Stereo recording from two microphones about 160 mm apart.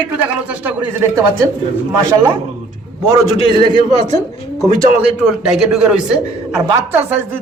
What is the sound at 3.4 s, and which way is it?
Speech, 30° left (ahead or behind).